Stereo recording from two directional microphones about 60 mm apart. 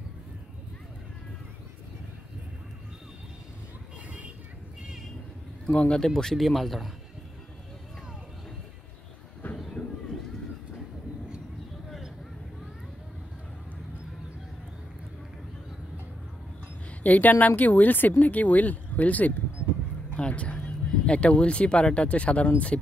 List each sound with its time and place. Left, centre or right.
5.7 s speech: centre
9.4 s train: left
17.0 s speech: left
20.2 s music: left
20.9 s speech: centre